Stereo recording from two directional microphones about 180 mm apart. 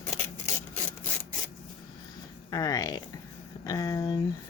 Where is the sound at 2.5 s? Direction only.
20° left (ahead or behind).